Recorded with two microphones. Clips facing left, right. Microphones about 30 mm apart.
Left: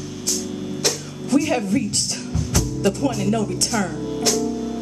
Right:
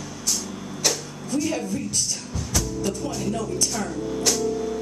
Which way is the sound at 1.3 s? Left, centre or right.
Left.